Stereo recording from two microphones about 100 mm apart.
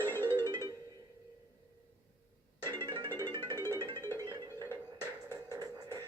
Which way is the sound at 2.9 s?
55° right (ahead or behind).